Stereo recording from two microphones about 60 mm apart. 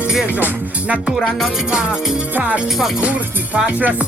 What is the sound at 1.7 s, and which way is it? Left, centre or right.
Speech, centre.